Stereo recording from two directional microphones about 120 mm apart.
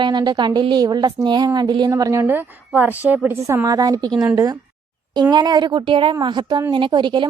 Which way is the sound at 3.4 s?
25° right (ahead or behind).